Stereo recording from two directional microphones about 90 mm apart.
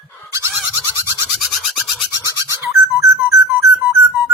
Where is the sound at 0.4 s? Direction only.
20° right (ahead or behind).